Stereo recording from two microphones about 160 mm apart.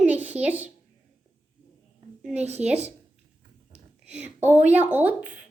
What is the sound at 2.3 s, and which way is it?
Speech, 45° right (ahead or behind).